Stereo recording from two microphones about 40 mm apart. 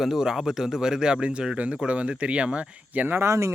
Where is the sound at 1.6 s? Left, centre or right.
Right.